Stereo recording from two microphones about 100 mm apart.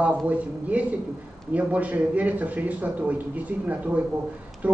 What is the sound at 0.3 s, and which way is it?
Speech, 15° right (ahead or behind).